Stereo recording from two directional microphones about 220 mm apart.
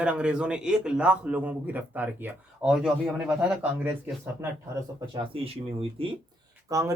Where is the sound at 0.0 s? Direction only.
5° right (ahead or behind).